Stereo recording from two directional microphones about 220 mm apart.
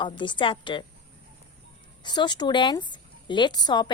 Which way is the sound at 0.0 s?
20° left (ahead or behind).